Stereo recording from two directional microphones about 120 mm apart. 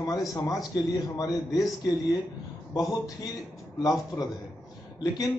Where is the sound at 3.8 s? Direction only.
30° left (ahead or behind).